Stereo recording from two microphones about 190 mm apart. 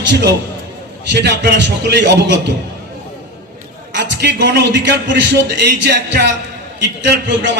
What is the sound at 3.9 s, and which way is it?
A man's voice, 65° right (ahead or behind).